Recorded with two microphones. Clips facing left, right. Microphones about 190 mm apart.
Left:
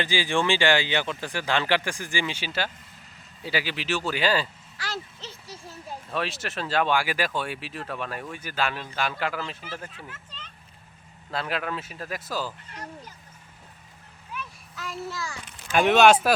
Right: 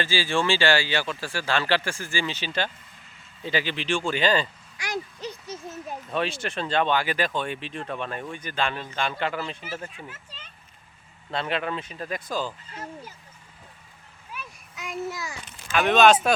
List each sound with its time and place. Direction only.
0.0 s speech: 15° left (ahead or behind)
4.8 s a sound: 15° right (ahead or behind)
6.1 s speech: centre (ahead or behind)
9.6 s speech: 10° right (ahead or behind)
11.3 s speech: centre (ahead or behind)
12.7 s speech: 5° right (ahead or behind)
14.8 s a child's voice: 20° right (ahead or behind)
15.8 s speech: 10° left (ahead or behind)